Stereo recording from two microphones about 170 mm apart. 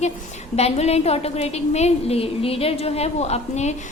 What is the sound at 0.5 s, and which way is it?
A woman's voice, 40° left (ahead or behind).